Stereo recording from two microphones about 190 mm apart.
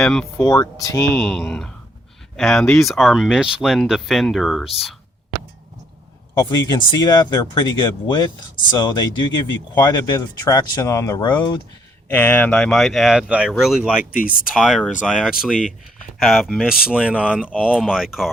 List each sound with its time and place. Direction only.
0.0 s speech: 5° left (ahead or behind)
0.4 s speech: 15° left (ahead or behind)
1.1 s speech: 5° left (ahead or behind)
6.3 s speech: 20° left (ahead or behind)
12.0 s speech: 10° left (ahead or behind); by 14.0 s 5° right (ahead or behind)
14.0 s speech: 45° left (ahead or behind)
14.3 s speech: centre (ahead or behind)